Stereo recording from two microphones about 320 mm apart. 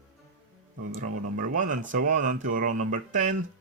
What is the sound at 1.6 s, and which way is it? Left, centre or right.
Speech, right.